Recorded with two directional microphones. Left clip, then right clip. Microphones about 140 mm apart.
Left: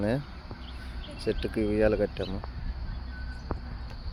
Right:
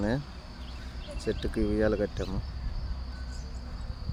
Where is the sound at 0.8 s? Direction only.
10° right (ahead or behind).